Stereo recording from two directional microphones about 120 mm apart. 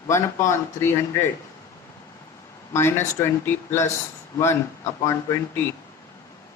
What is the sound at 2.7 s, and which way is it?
Speech, 20° left (ahead or behind).